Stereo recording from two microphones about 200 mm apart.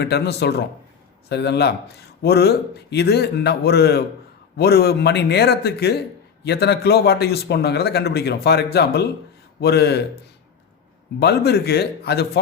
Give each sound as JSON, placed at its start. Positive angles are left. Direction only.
{"t": 0.0, "sound": "a man's voice", "side_deg": 55}
{"t": 11.2, "sound": "a man's voice", "side_deg": 55}